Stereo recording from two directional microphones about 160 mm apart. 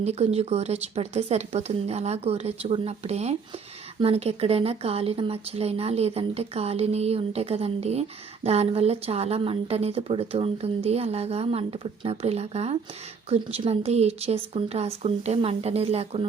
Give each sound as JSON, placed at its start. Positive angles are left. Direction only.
{"t": 0.0, "sound": "speech", "side_deg": -40}